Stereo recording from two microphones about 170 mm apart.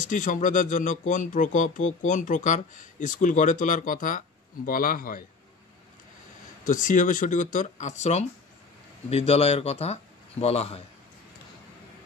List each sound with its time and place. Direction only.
0.0 s speech: 50° left (ahead or behind)
6.6 s speech: 50° left (ahead or behind)